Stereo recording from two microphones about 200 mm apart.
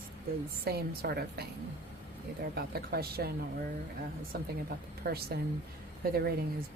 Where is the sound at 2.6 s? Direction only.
50° right (ahead or behind).